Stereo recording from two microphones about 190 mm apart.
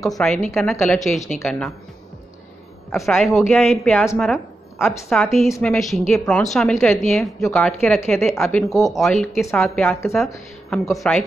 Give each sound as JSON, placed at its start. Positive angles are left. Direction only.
{"t": 0.2, "sound": "a woman's voice", "side_deg": 5}
{"t": 2.9, "sound": "a woman's voice", "side_deg": 0}
{"t": 9.8, "sound": "speech", "side_deg": 15}
{"t": 10.1, "sound": "a woman's voice", "side_deg": 0}